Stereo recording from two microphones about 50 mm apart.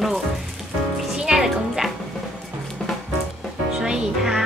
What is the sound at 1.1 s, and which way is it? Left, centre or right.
Music, centre.